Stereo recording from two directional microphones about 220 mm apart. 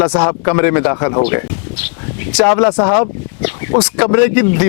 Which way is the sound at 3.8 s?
10° left (ahead or behind).